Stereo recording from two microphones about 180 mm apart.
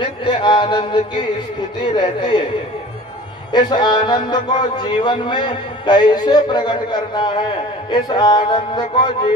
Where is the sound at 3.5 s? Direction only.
25° left (ahead or behind).